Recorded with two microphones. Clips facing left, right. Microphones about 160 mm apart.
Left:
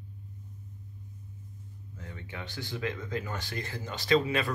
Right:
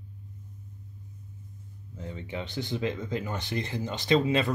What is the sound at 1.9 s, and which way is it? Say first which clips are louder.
Speech: right 7 dB; 20° right (ahead or behind).